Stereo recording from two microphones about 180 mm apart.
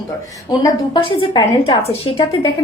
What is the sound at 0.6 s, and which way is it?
A woman's voice, 30° left (ahead or behind).